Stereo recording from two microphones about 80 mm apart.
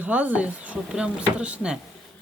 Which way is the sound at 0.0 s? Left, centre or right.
Centre.